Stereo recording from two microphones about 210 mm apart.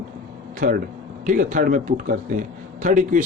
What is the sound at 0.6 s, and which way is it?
A man's voice, 40° right (ahead or behind).